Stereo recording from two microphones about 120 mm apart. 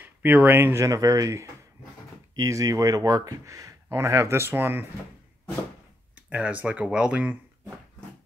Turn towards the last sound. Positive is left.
turn(degrees=-10)  # may be behind; listen again after turning